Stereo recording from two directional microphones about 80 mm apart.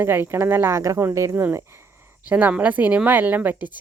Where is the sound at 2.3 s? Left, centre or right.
Right.